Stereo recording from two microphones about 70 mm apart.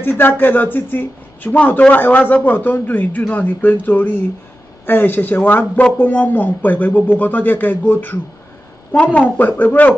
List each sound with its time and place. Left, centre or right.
0.0 s speech: left